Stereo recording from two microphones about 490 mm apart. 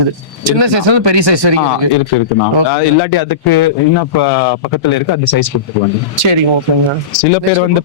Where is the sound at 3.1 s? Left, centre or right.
Left.